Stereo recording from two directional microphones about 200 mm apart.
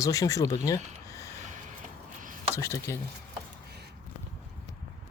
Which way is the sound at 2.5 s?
15° left (ahead or behind).